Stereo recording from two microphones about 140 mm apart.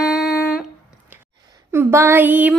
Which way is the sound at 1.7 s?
20° right (ahead or behind).